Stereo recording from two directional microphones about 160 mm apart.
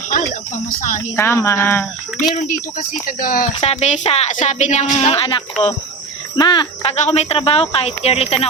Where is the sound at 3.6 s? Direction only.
40° left (ahead or behind).